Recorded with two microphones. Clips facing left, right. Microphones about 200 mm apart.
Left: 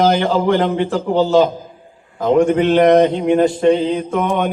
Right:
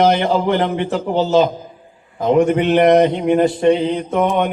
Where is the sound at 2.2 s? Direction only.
20° right (ahead or behind).